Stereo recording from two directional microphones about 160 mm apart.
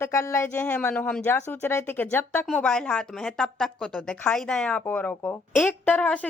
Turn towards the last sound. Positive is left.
turn(degrees=10)  # may be behind; listen again after turning